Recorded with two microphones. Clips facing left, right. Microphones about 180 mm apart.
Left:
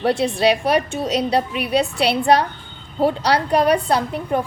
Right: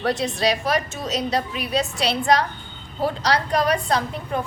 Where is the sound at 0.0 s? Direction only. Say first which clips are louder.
Left 5 dB; 30° left (ahead or behind).